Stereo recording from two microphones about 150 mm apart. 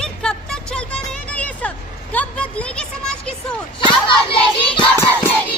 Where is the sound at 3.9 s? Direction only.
35° left (ahead or behind).